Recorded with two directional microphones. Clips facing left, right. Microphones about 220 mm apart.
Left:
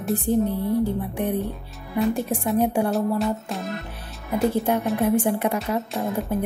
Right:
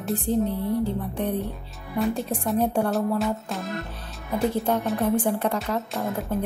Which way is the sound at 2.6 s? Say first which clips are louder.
Left 2 dB; 10° left (ahead or behind).